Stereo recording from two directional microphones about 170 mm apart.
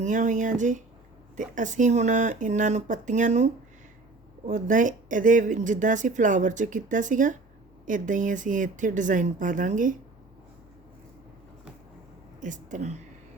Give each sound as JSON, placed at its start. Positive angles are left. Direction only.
{"t": 0.0, "sound": "speech", "side_deg": -45}
{"t": 12.4, "sound": "a woman's voice", "side_deg": -45}